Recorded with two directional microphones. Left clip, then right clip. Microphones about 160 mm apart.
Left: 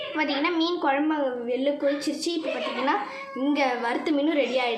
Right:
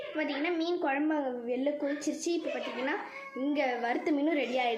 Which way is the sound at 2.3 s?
15° right (ahead or behind).